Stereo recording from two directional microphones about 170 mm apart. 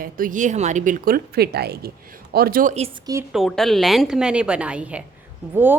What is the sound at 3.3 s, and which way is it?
A woman's voice, centre (ahead or behind).